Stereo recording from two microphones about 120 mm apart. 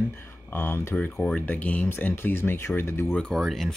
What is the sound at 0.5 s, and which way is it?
Speech, 15° left (ahead or behind).